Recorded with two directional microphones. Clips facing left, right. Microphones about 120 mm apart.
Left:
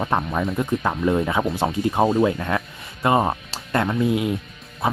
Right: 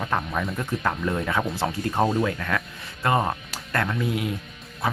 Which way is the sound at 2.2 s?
25° left (ahead or behind).